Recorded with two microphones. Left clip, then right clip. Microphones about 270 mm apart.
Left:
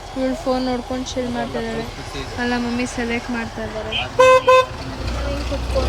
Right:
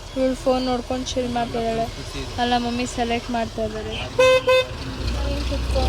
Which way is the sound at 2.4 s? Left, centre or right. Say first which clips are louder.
Right 1 dB; centre.